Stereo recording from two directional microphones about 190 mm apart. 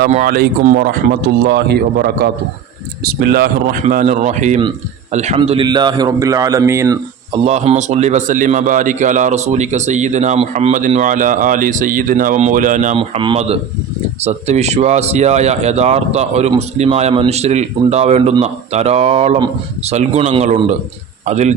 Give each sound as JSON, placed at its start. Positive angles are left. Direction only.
{"t": 0.1, "sound": "speech", "side_deg": -45}
{"t": 1.5, "sound": "a man's voice", "side_deg": -60}
{"t": 3.8, "sound": "a man's voice", "side_deg": -40}
{"t": 5.4, "sound": "speech", "side_deg": -25}
{"t": 7.4, "sound": "a man's voice", "side_deg": -35}
{"t": 13.0, "sound": "a man's voice", "side_deg": -30}